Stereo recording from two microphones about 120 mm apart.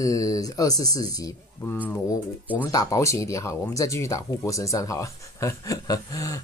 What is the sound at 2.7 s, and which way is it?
Speech, 30° left (ahead or behind).